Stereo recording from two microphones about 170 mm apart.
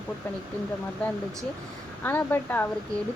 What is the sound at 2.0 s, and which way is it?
Speech, 10° left (ahead or behind).